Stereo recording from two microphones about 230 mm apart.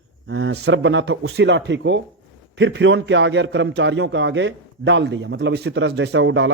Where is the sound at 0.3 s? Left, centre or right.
Right.